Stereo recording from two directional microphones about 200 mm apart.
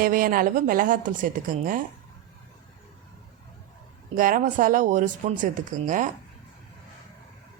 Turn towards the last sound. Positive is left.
turn(degrees=-40)  # may be behind; listen again after turning